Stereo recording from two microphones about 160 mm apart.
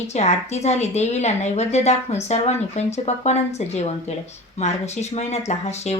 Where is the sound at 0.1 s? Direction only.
45° left (ahead or behind).